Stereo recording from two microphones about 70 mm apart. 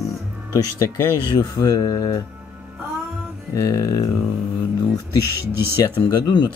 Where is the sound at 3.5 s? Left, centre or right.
Left.